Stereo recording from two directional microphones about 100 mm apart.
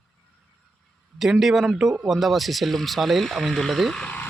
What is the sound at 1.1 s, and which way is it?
Speech, centre (ahead or behind).